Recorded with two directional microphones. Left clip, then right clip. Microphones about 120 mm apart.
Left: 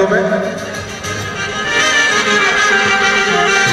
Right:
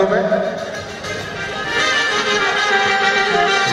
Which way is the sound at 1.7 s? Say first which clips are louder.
Left 4 dB; 40° left (ahead or behind).